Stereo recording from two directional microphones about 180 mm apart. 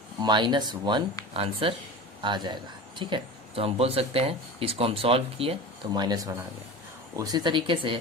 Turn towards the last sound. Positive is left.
turn(degrees=-30)  # may be behind; listen again after turning